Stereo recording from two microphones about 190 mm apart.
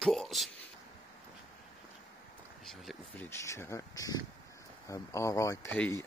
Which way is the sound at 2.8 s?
10° left (ahead or behind).